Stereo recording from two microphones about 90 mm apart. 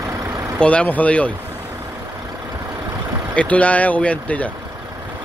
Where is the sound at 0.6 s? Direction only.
15° left (ahead or behind).